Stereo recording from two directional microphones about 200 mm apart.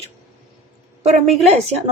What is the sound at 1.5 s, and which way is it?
Speech, 30° right (ahead or behind).